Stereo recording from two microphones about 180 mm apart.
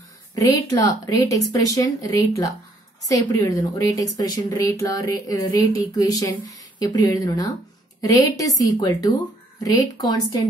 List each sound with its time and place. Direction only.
0.3 s a woman's voice: 20° left (ahead or behind)